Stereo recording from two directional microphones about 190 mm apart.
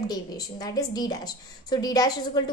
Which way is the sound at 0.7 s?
20° left (ahead or behind).